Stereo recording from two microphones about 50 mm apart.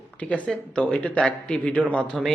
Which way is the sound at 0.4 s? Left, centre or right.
Centre.